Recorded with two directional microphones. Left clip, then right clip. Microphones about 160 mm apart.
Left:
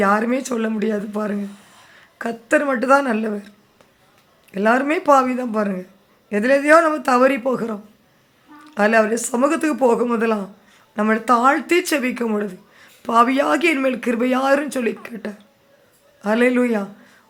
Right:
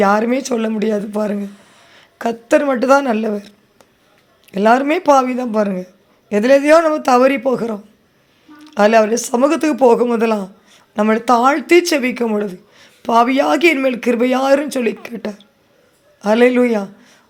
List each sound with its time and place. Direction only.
0.0 s speech: 20° right (ahead or behind)
4.5 s speech: 20° right (ahead or behind)